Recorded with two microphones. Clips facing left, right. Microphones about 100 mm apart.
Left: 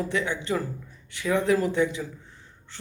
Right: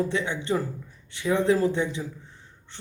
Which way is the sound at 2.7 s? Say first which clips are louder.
Even; 25° right (ahead or behind).